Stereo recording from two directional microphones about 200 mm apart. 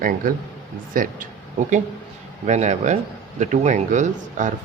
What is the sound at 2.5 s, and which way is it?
Speech, 35° right (ahead or behind).